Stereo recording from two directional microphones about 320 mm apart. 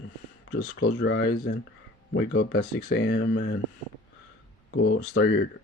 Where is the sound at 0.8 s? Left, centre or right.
Left.